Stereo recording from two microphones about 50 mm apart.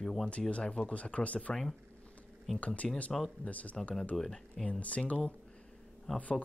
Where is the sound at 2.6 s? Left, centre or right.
Left.